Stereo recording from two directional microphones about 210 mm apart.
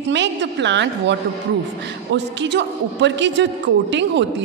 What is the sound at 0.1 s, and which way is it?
A man's voice, 55° right (ahead or behind).